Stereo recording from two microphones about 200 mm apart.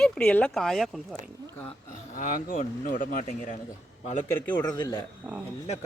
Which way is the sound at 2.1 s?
45° left (ahead or behind).